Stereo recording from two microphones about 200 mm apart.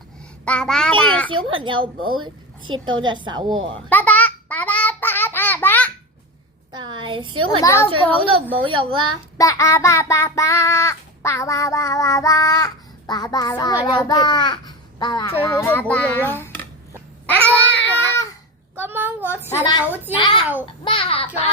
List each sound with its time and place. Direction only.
0.4 s a child's voice: 5° left (ahead or behind)
1.5 s a woman's voice: 25° right (ahead or behind)
3.8 s babbling: 10° left (ahead or behind)
6.7 s a woman's voice: 20° right (ahead or behind)
7.6 s child singing: 15° left (ahead or behind)
8.1 s a woman's voice: 25° right (ahead or behind)
9.4 s child singing: 15° left (ahead or behind)
13.9 s a child's voice: 20° left (ahead or behind)
15.4 s child singing: 10° left (ahead or behind)
17.2 s babbling: 10° left (ahead or behind)
18.8 s child singing: 10° right (ahead or behind)
19.8 s a child's voice: 10° right (ahead or behind)
20.1 s a child's voice: 25° left (ahead or behind)